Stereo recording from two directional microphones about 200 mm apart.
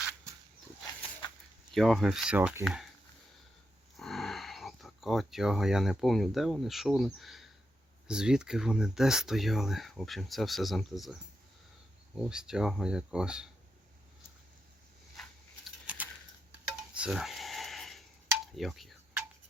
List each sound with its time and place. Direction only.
1.7 s speech: centre (ahead or behind)
3.9 s speech: centre (ahead or behind)
15.9 s typing: 5° right (ahead or behind)
17.0 s a sound: centre (ahead or behind)